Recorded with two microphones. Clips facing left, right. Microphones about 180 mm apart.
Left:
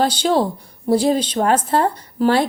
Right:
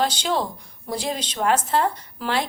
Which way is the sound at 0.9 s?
30° left (ahead or behind).